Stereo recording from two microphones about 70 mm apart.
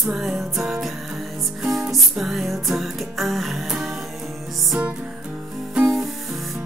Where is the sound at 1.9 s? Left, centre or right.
Centre.